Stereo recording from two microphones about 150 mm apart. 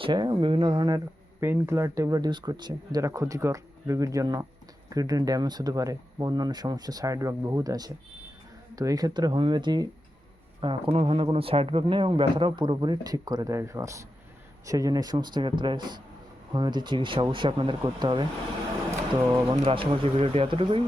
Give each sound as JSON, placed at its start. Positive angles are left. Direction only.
{"t": 0.0, "sound": "speech", "side_deg": -30}
{"t": 10.9, "sound": "a man's voice", "side_deg": -40}
{"t": 19.3, "sound": "a man's voice", "side_deg": -30}